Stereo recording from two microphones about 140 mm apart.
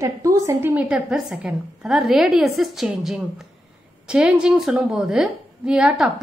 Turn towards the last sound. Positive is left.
turn(degrees=-5)  # may be behind; listen again after turning